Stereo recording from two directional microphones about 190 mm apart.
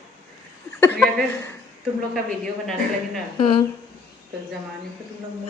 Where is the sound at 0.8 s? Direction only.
10° left (ahead or behind).